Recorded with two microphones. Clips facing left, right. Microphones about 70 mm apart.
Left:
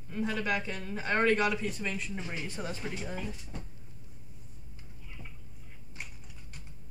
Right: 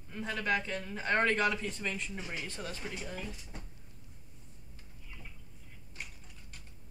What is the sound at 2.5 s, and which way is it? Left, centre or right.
Speech, centre.